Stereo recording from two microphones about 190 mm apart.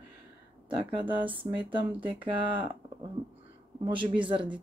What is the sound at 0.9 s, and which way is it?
Speech, 25° right (ahead or behind).